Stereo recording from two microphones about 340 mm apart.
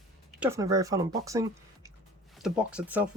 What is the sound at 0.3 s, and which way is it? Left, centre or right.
Speech, centre.